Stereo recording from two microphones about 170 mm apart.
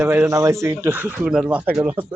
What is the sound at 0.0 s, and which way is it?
Speech, 15° right (ahead or behind).